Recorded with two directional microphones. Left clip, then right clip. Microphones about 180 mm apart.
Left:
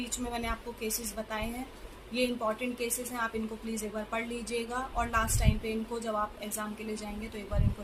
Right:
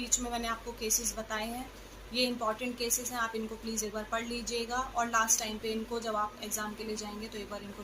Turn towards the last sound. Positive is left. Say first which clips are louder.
# right 1 dB
turn(degrees=5)  # may be behind; listen again after turning